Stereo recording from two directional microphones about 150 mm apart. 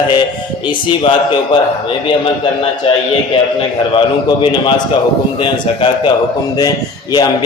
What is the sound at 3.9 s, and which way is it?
A man's voice, 35° left (ahead or behind).